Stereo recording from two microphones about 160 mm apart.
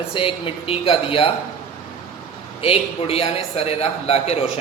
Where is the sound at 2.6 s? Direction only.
35° left (ahead or behind).